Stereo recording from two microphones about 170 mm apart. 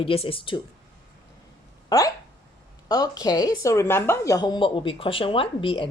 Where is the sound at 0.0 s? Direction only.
35° left (ahead or behind).